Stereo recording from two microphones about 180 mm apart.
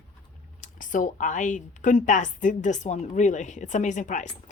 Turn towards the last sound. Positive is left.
turn(degrees=45)  # may be behind; listen again after turning